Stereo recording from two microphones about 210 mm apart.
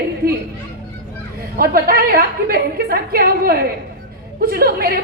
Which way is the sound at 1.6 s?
45° right (ahead or behind).